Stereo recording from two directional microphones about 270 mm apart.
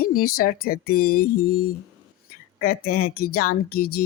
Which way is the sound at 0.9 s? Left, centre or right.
Left.